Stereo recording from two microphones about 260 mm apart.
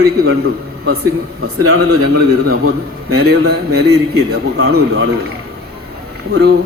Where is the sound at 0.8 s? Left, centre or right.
Right.